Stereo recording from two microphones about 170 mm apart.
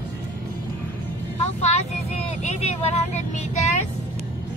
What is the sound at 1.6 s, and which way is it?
Vehicle, 40° left (ahead or behind).